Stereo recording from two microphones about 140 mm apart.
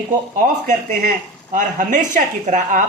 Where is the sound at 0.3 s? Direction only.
70° right (ahead or behind).